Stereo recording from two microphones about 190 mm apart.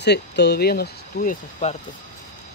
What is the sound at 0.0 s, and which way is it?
Speech, 60° left (ahead or behind).